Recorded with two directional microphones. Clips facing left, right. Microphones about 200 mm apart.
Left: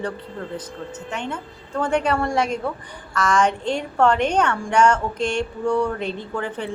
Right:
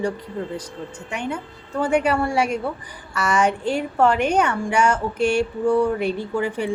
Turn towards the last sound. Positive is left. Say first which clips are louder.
# right 4 dB
turn(degrees=-10)  # may be behind; listen again after turning